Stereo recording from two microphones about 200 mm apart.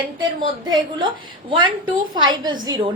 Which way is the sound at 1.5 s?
25° right (ahead or behind).